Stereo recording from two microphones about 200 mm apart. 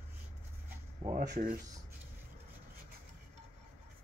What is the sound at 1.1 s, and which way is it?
Speech, 40° right (ahead or behind).